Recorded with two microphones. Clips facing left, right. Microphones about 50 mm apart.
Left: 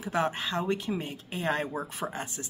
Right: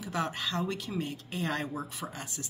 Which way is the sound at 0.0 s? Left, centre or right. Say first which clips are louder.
Left 4 dB; left.